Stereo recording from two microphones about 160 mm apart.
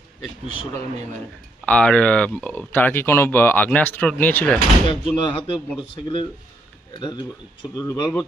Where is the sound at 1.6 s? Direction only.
5° left (ahead or behind).